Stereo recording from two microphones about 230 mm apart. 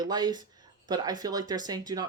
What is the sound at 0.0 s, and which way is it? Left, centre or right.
Speech, centre.